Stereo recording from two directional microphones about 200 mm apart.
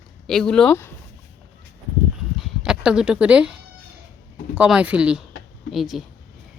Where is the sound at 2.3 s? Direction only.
5° right (ahead or behind).